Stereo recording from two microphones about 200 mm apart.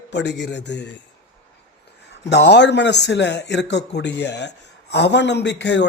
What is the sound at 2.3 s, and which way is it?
Speech, 60° left (ahead or behind).